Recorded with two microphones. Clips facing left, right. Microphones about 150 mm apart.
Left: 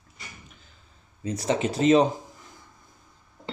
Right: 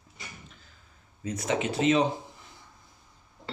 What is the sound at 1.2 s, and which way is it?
Speech, 35° left (ahead or behind).